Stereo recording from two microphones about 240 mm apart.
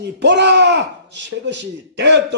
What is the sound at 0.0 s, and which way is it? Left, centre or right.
A man's voice, right.